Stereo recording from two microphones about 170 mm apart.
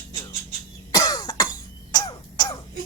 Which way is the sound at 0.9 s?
20° left (ahead or behind).